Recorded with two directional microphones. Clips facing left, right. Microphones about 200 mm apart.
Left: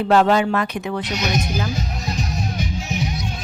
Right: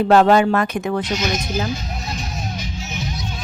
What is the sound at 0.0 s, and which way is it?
A woman's voice, 45° right (ahead or behind).